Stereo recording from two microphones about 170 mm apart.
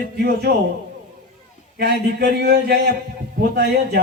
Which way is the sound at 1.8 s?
70° right (ahead or behind).